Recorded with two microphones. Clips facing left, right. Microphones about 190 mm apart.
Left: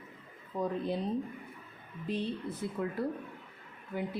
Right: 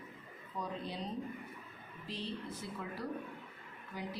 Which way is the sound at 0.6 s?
55° left (ahead or behind).